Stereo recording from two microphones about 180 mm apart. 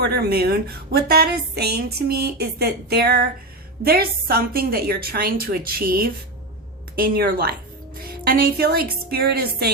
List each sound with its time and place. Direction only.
0.0 s a woman's voice: 65° right (ahead or behind)